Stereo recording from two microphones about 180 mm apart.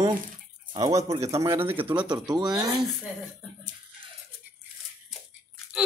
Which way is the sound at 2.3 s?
25° right (ahead or behind).